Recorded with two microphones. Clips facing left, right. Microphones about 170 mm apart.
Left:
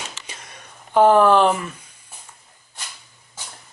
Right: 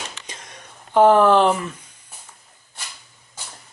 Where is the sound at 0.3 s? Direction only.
10° left (ahead or behind).